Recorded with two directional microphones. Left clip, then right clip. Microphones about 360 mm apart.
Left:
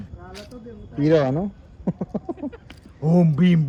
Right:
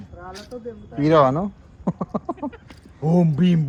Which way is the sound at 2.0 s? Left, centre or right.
Right.